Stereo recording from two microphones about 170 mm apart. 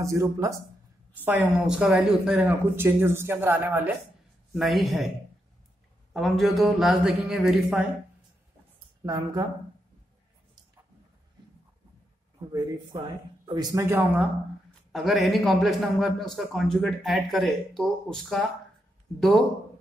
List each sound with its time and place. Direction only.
0.0 s speech: 20° right (ahead or behind)
4.6 s a man's voice: centre (ahead or behind)
6.1 s a man's voice: centre (ahead or behind)
9.0 s speech: 20° right (ahead or behind)
12.5 s a man's voice: 25° right (ahead or behind); by 19.4 s centre (ahead or behind)